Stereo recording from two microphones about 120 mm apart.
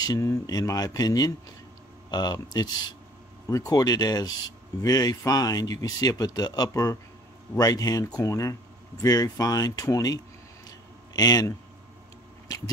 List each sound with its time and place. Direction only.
0.0 s speech: 30° left (ahead or behind)